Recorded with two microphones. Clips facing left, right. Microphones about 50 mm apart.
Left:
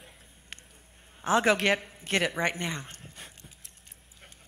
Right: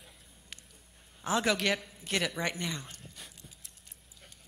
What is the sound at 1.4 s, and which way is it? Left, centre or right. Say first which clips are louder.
A man's voice: left 5 dB; left.